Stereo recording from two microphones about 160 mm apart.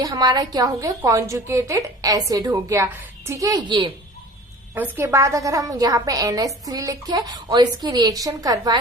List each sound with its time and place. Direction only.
0.0 s a woman's voice: 25° right (ahead or behind)
4.7 s a woman's voice: 10° right (ahead or behind)